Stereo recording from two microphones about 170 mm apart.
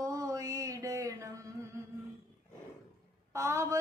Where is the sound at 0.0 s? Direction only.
20° right (ahead or behind).